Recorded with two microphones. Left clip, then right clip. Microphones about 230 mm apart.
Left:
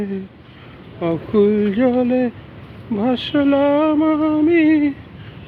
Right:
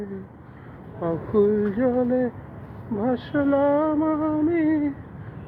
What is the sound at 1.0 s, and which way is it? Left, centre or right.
Female singing, left.